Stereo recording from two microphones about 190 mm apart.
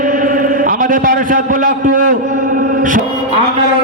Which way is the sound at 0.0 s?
45° right (ahead or behind).